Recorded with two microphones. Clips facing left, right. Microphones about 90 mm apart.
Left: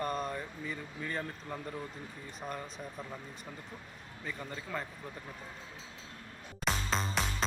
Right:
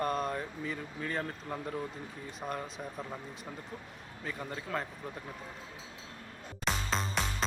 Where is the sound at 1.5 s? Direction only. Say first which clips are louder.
Right 4 dB; 15° right (ahead or behind).